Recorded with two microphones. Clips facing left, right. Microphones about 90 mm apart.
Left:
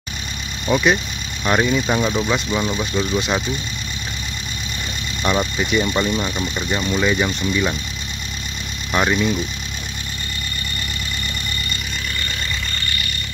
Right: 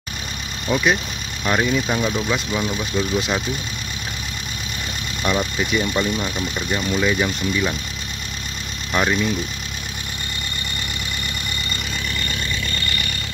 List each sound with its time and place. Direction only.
0.7 s speech: 5° left (ahead or behind)
2.0 s speech: 20° left (ahead or behind)
2.8 s speech: centre (ahead or behind)
5.2 s speech: centre (ahead or behind)
8.9 s speech: 5° left (ahead or behind)